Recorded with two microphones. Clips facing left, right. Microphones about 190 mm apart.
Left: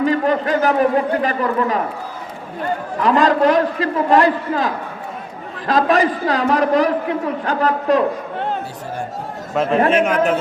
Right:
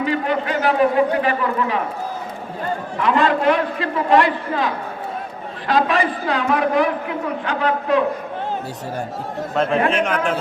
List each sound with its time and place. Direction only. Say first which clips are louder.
0.0 s a man's voice: left 4 dB; 40° left (ahead or behind)
3.0 s a man's voice: left 3 dB; 40° left (ahead or behind)
9.9 s a man's voice: left 4 dB; 5° left (ahead or behind)